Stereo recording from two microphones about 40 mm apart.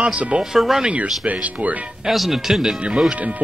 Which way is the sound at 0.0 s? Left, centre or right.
Right.